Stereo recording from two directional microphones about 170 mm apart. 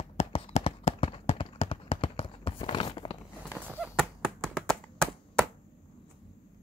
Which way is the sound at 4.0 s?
5° left (ahead or behind).